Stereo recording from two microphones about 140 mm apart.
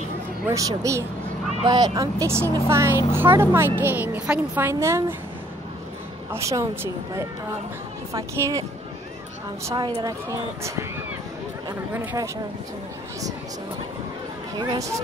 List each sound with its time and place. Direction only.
0.5 s a woman's voice: 25° right (ahead or behind)
6.3 s speech: 20° right (ahead or behind)
9.8 s speech: 30° right (ahead or behind)
14.6 s speech: 25° right (ahead or behind)